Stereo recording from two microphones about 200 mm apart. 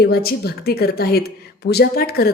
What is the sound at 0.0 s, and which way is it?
A woman's voice, 50° left (ahead or behind).